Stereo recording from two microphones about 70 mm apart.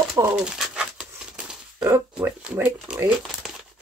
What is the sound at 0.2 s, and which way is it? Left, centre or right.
Speech, right.